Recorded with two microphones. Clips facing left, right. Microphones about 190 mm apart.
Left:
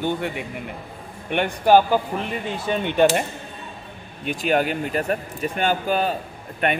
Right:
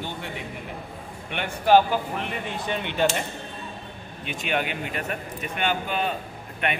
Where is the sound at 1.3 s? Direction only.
40° left (ahead or behind).